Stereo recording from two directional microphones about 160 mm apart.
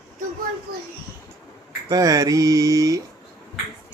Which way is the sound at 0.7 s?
80° right.